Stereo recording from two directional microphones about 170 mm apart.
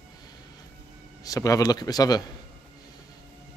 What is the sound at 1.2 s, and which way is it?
Speech, 20° left (ahead or behind).